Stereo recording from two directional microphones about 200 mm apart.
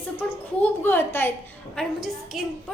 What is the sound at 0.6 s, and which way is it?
Speech, 10° left (ahead or behind).